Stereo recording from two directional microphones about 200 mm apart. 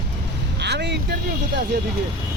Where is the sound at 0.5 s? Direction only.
60° right (ahead or behind).